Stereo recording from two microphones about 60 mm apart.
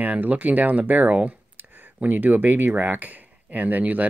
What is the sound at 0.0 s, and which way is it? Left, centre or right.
Speech, right.